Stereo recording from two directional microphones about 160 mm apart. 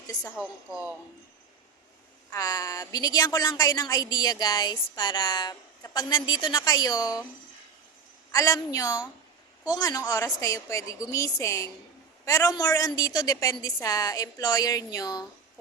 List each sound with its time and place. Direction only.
0.3 s a woman's voice: 5° right (ahead or behind)
2.3 s a woman's voice: 20° left (ahead or behind)
8.3 s a woman's voice: 20° left (ahead or behind)